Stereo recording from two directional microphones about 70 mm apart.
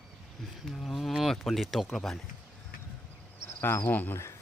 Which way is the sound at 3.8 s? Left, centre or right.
Left.